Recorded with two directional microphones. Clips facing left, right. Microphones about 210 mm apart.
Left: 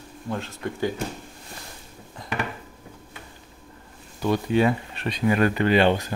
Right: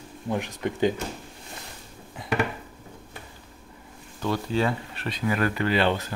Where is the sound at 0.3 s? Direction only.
15° right (ahead or behind).